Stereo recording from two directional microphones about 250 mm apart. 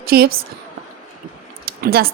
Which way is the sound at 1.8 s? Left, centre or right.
Right.